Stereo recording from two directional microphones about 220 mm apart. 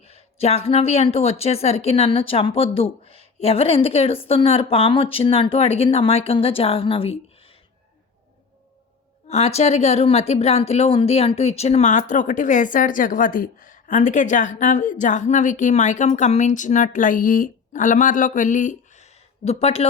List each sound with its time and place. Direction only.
0.1 s a woman's voice: 25° left (ahead or behind)
9.2 s a woman's voice: 30° left (ahead or behind)